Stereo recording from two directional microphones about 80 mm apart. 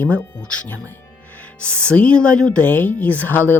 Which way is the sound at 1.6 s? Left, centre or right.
Centre.